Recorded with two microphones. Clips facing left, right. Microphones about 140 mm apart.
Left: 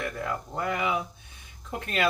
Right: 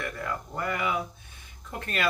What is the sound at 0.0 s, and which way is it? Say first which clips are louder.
Speech: left 2 dB; 20° left (ahead or behind).